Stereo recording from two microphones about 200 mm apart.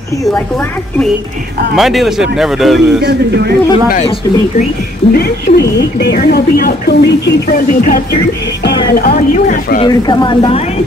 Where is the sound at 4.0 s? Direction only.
35° left (ahead or behind).